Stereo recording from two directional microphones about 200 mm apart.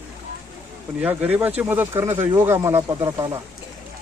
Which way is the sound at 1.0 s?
10° right (ahead or behind).